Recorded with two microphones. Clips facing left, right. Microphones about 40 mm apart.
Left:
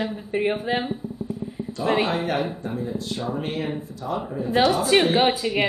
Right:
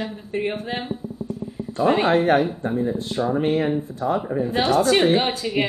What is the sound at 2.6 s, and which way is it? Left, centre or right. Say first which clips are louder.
Speech: right 5 dB; right.